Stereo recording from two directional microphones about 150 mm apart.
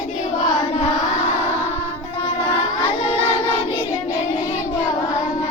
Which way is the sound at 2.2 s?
40° left (ahead or behind).